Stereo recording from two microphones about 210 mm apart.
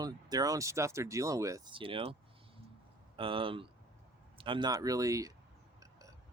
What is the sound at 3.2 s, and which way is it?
Speech, 25° right (ahead or behind).